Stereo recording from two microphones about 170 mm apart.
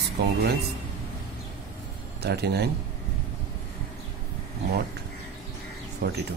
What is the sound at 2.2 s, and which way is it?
Speech, 75° right (ahead or behind).